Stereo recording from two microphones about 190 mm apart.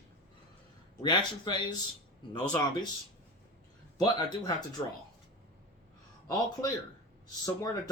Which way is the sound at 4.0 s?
20° left (ahead or behind).